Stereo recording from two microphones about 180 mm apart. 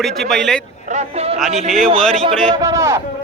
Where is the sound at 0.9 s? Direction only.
35° right (ahead or behind).